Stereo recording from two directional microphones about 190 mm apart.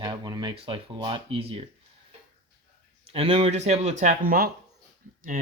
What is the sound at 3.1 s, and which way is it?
Speech, 30° right (ahead or behind).